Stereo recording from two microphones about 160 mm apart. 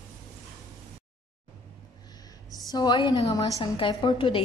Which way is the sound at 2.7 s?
30° left (ahead or behind).